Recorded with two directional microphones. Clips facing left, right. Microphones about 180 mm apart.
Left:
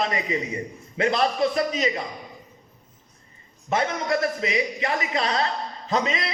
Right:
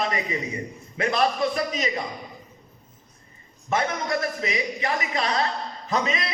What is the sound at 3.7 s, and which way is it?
A man's voice, 25° left (ahead or behind).